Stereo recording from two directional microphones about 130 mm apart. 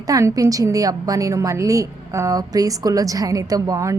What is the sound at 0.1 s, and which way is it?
A woman's voice, 25° right (ahead or behind).